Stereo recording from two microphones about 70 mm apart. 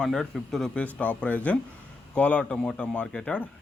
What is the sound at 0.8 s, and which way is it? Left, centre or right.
A man's voice, centre.